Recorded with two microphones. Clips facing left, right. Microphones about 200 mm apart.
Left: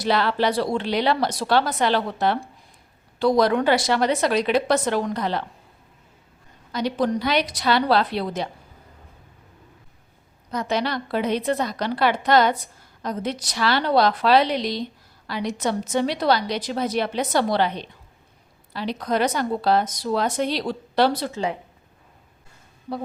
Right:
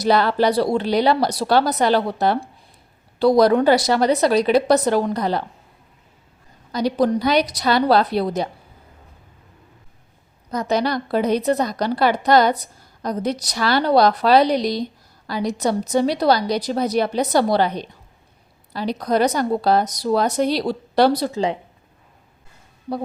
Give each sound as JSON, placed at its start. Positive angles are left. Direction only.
{"t": 0.0, "sound": "a woman's voice", "side_deg": -40}
{"t": 6.7, "sound": "a woman's voice", "side_deg": -40}
{"t": 10.5, "sound": "a woman's voice", "side_deg": -40}